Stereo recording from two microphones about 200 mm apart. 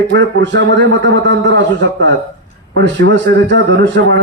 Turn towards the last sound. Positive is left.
turn(degrees=-60)  # may be behind; listen again after turning